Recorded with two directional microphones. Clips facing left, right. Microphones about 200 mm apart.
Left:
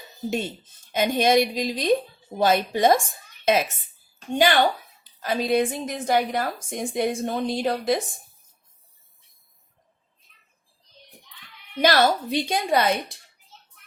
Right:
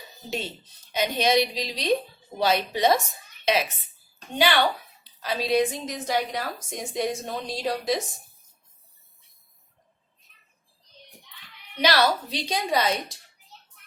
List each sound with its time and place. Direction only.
0.3 s a woman's voice: 50° left (ahead or behind)
11.8 s a woman's voice: 50° left (ahead or behind)